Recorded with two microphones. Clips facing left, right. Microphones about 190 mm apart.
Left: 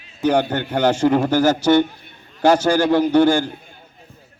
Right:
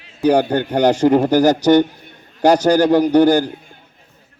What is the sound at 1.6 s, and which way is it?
Speech, 40° right (ahead or behind).